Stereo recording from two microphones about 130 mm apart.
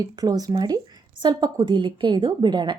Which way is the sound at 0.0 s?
30° right (ahead or behind).